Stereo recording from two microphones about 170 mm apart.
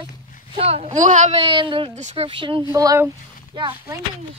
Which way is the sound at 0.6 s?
40° right (ahead or behind).